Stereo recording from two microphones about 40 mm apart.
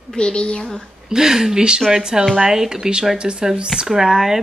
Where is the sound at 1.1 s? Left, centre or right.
Centre.